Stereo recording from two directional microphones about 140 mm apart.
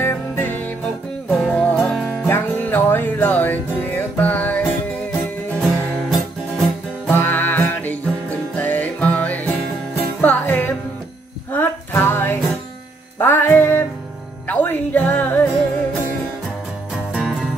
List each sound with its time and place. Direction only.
0.0 s music: 15° left (ahead or behind)
5.5 s music: 10° right (ahead or behind)
7.1 s music: 15° left (ahead or behind)